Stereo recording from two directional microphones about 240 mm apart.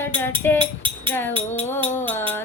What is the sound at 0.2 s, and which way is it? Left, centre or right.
Music, centre.